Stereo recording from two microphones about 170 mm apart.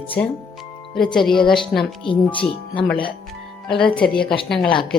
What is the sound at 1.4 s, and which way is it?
Speech, 30° left (ahead or behind).